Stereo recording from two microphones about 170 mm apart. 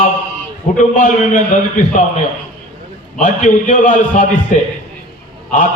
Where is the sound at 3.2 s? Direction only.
50° left (ahead or behind).